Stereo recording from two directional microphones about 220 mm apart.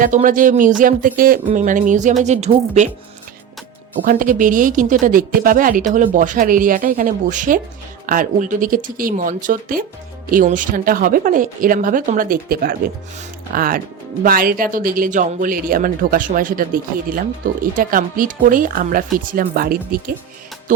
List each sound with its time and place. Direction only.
0.0 s speech: 35° right (ahead or behind)
4.0 s speech: 40° right (ahead or behind)